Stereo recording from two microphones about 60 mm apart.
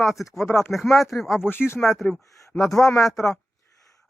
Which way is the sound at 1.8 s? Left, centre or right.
Centre.